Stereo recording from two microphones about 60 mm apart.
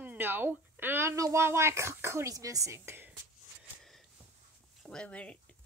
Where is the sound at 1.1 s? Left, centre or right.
Right.